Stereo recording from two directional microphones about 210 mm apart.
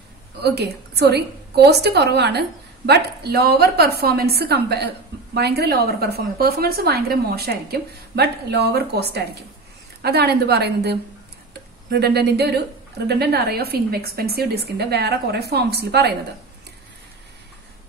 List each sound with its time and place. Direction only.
0.4 s a woman's voice: 50° right (ahead or behind)